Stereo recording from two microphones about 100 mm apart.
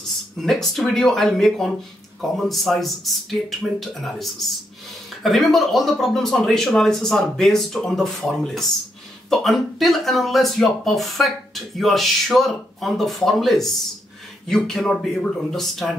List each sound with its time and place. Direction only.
0.4 s speech: 5° left (ahead or behind)